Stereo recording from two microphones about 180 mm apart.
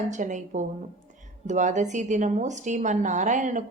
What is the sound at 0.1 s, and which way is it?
Speech, 45° right (ahead or behind).